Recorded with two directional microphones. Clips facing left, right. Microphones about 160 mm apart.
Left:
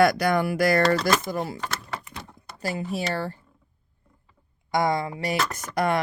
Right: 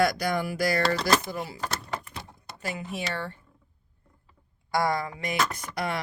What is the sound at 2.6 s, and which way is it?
Speech, 35° left (ahead or behind).